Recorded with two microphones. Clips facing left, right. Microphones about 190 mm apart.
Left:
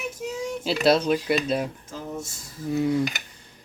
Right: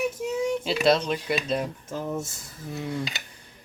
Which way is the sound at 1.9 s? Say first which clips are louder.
Right 4 dB; 55° right (ahead or behind).